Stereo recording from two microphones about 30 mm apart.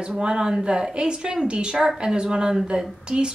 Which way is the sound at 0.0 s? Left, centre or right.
Right.